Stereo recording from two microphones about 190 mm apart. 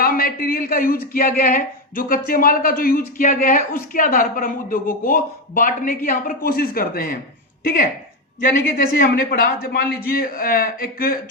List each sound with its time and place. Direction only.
0.0 s a woman's voice: 50° left (ahead or behind)